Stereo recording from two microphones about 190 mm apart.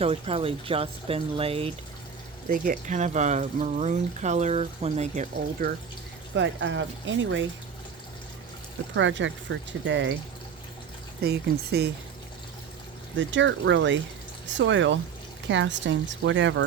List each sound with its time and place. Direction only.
0.0 s speech: 30° right (ahead or behind)
2.5 s speech: 45° right (ahead or behind)
6.3 s speech: 75° right (ahead or behind)
9.0 s speech: 80° right
11.2 s speech: 55° right (ahead or behind)
13.1 s speech: 75° right (ahead or behind)